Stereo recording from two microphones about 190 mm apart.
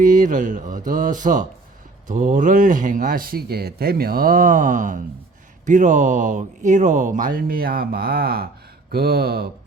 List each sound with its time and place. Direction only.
0.0 s speech: 45° right (ahead or behind)